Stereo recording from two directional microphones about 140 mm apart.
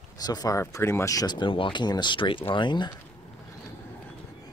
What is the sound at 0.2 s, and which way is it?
Speech, 25° left (ahead or behind).